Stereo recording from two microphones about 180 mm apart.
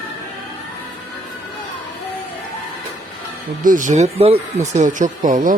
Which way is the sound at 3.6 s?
45° right (ahead or behind).